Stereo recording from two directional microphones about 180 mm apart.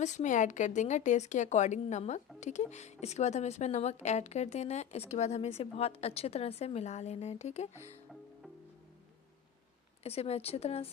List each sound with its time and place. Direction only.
0.0 s a woman's voice: 40° left (ahead or behind)
10.0 s a woman's voice: 35° left (ahead or behind)